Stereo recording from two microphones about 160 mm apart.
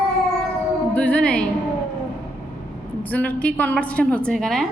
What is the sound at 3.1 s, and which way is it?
A woman's voice, 10° left (ahead or behind).